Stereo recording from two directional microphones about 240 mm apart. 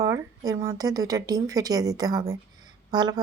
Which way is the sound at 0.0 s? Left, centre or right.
Centre.